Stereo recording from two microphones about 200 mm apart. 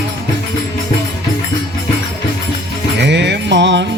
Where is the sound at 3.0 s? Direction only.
60° right (ahead or behind).